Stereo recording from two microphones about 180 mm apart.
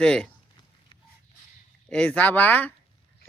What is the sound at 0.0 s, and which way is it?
Speech, 5° left (ahead or behind).